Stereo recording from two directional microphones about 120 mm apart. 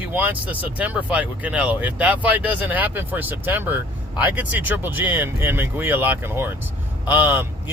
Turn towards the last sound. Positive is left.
turn(degrees=-15)  # may be behind; listen again after turning